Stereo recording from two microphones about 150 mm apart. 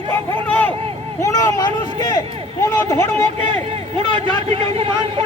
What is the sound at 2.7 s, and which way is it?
Speech, 15° left (ahead or behind).